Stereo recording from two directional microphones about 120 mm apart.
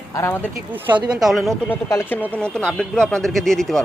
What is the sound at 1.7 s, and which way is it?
Speech, 20° left (ahead or behind).